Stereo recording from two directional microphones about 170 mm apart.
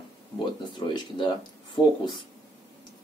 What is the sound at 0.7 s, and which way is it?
Speech, 25° left (ahead or behind).